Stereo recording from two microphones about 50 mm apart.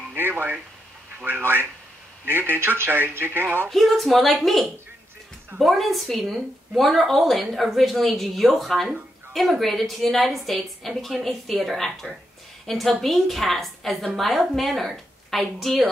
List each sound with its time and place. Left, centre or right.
0.1 s speech: right
3.7 s a woman's voice: centre